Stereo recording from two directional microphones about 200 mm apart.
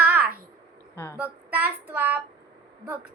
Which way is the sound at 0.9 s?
10° left (ahead or behind).